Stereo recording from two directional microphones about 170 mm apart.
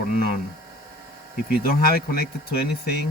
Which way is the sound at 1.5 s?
65° left (ahead or behind).